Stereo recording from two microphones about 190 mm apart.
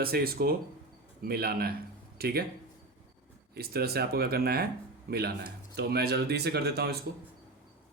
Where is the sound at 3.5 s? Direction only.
55° right (ahead or behind).